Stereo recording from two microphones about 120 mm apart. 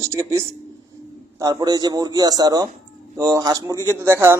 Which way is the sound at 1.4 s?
35° right (ahead or behind).